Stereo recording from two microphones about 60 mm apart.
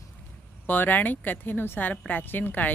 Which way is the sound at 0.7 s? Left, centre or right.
Left.